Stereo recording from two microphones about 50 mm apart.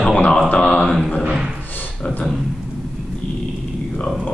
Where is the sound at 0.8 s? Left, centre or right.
Centre.